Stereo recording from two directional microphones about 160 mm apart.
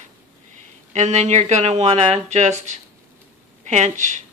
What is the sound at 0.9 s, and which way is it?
A woman's voice, 45° right (ahead or behind).